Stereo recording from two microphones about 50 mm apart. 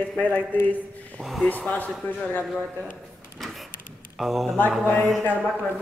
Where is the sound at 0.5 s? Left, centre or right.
Left.